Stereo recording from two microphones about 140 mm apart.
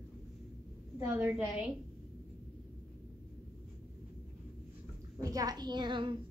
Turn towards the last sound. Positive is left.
turn(degrees=-35)  # may be behind; listen again after turning